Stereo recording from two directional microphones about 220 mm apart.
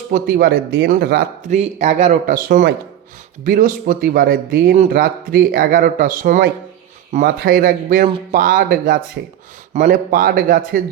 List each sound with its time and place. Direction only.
0.1 s speech: 40° right (ahead or behind)
1.5 s speech: 30° right (ahead or behind)